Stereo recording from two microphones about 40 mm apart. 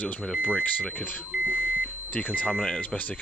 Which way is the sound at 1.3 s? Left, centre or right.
Right.